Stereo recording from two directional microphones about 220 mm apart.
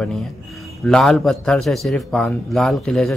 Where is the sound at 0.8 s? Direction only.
5° left (ahead or behind).